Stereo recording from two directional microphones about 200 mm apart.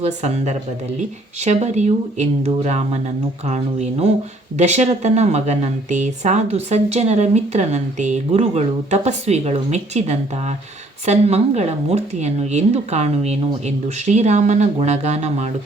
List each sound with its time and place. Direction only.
0.0 s speech: 35° right (ahead or behind)